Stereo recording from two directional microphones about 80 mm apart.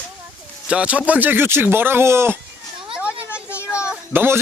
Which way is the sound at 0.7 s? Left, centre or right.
Centre.